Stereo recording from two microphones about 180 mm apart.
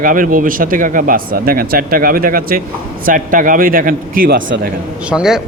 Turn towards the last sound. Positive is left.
turn(degrees=-5)  # may be behind; listen again after turning